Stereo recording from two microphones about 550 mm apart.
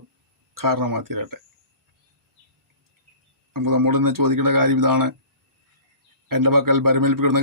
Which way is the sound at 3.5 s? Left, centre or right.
Right.